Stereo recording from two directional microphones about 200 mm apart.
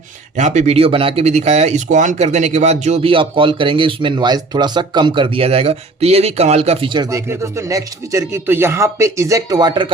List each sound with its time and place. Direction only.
0.3 s speech: 35° right (ahead or behind)